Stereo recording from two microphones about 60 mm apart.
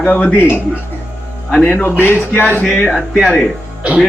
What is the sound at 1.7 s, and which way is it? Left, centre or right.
Speech, left.